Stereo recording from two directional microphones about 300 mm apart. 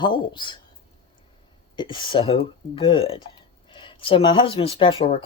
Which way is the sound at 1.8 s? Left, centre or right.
Centre.